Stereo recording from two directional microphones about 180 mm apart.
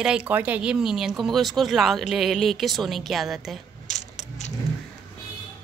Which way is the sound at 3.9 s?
40° left (ahead or behind).